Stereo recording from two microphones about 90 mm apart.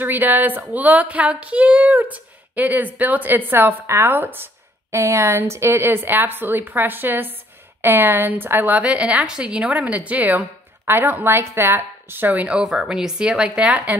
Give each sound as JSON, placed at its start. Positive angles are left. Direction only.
{"t": 0.0, "sound": "a woman's voice", "side_deg": -20}